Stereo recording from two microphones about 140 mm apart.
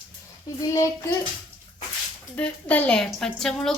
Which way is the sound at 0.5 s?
20° left (ahead or behind).